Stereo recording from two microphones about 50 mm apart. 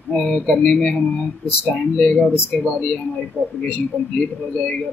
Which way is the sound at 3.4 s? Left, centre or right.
Left.